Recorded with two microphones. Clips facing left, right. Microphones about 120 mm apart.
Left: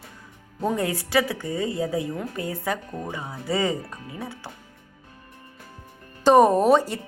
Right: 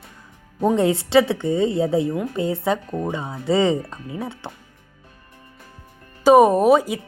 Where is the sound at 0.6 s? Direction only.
25° right (ahead or behind).